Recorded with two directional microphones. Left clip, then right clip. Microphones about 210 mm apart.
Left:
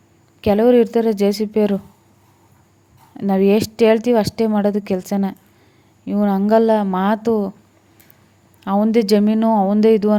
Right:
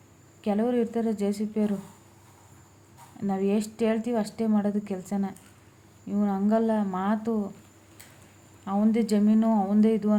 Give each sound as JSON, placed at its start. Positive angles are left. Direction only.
{"t": 0.4, "sound": "a woman's voice", "side_deg": 45}
{"t": 3.2, "sound": "a woman's voice", "side_deg": 45}
{"t": 8.6, "sound": "speech", "side_deg": 40}